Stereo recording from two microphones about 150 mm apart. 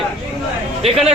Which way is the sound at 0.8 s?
40° right (ahead or behind).